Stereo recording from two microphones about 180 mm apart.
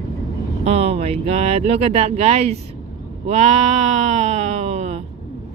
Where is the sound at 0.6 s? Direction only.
35° right (ahead or behind).